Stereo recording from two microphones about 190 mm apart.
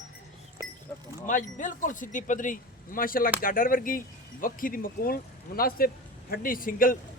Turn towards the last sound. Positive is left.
turn(degrees=45)  # may be behind; listen again after turning